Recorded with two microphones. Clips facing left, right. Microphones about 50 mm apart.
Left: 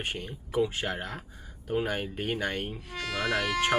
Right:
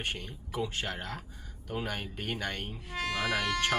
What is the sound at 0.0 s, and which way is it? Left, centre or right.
Speech, centre.